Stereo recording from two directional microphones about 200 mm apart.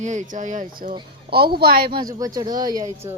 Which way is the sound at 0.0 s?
40° right (ahead or behind).